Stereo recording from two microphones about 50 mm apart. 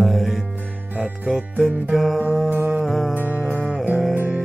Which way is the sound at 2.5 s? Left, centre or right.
Right.